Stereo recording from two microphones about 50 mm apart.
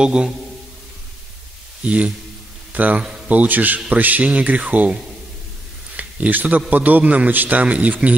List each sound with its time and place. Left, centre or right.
0.0 s a man's voice: centre
2.7 s a man's voice: right
5.9 s a sound: right
6.7 s speech: right